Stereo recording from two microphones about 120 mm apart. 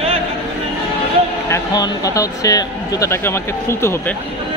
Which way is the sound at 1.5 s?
30° left (ahead or behind).